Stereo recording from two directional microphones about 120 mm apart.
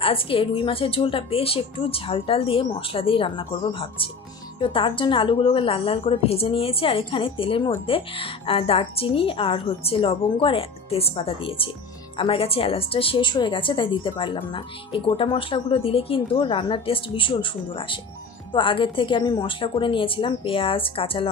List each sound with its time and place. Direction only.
0.0 s a woman's voice: 50° left (ahead or behind)